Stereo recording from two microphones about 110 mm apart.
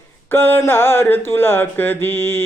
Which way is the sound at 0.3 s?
20° left (ahead or behind).